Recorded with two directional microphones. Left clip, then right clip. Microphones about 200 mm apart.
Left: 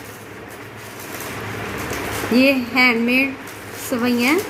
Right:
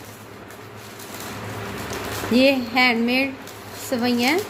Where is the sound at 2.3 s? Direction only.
25° right (ahead or behind).